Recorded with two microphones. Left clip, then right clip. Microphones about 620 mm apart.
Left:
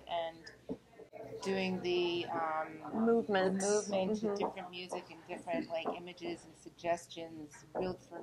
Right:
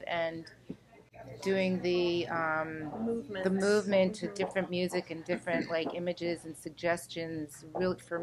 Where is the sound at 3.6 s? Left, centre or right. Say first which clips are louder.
Right 6 dB; right.